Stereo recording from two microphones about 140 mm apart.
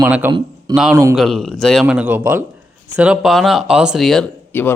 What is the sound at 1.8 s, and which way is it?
Speech, 10° right (ahead or behind).